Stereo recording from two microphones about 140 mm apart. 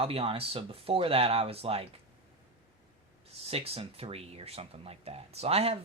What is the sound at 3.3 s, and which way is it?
Speech, 45° right (ahead or behind).